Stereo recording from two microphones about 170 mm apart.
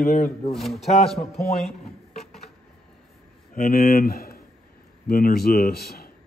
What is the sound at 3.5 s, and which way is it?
Speech, 55° left (ahead or behind).